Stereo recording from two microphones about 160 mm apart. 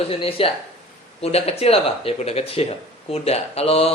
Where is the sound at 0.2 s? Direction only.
35° left (ahead or behind).